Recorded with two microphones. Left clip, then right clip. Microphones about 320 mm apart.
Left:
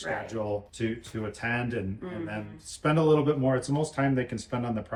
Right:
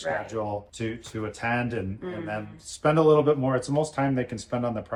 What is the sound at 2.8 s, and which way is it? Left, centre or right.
Speech, centre.